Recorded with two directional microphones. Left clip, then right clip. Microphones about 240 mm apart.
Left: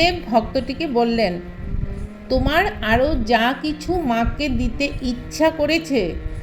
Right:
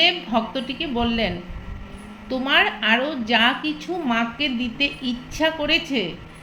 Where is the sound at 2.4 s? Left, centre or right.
Left.